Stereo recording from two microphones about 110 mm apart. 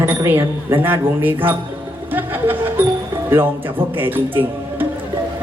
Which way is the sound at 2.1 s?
15° right (ahead or behind).